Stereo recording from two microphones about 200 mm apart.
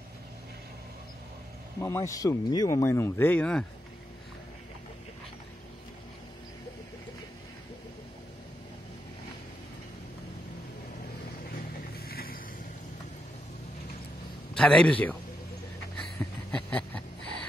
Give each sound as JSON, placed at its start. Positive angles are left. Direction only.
{"t": 1.8, "sound": "speech", "side_deg": 15}
{"t": 12.0, "sound": "vehicle", "side_deg": 50}
{"t": 14.5, "sound": "a man's voice", "side_deg": 5}
{"t": 16.2, "sound": "a sound", "side_deg": 5}